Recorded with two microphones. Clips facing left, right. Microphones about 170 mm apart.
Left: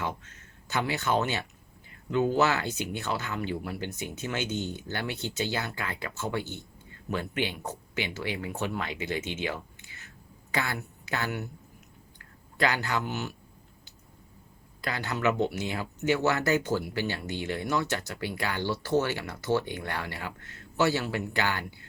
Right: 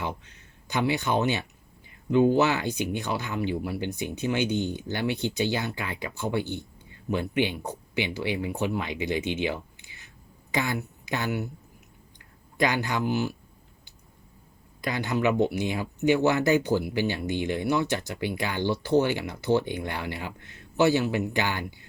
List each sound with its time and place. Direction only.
0.7 s speech: 15° right (ahead or behind)
12.5 s speech: 15° right (ahead or behind)
14.8 s speech: 15° right (ahead or behind)